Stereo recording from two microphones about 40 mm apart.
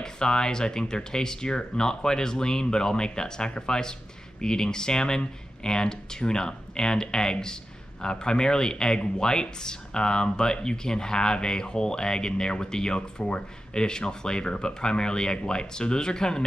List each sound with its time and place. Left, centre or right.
0.0 s speech: centre